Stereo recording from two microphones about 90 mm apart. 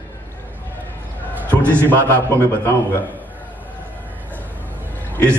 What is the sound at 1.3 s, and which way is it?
Speech, 25° right (ahead or behind).